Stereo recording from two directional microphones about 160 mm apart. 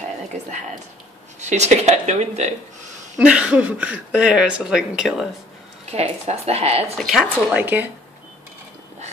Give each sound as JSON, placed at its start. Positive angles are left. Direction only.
{"t": 1.4, "sound": "speech", "side_deg": -45}
{"t": 3.2, "sound": "speech", "side_deg": -5}
{"t": 5.9, "sound": "speech", "side_deg": -40}
{"t": 7.0, "sound": "speech", "side_deg": -5}